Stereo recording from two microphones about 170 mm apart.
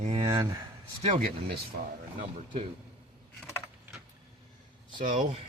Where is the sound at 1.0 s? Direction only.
50° right (ahead or behind).